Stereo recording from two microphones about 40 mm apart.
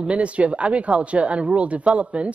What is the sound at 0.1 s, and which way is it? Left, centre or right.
Speech, right.